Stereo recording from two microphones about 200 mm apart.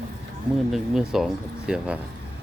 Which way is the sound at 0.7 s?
Centre (ahead or behind).